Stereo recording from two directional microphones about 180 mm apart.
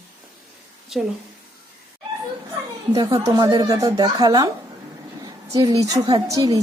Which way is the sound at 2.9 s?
25° right (ahead or behind).